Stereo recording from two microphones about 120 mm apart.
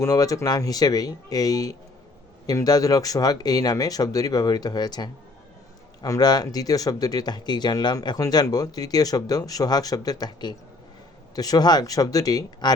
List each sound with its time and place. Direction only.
0.0 s speech: 30° left (ahead or behind)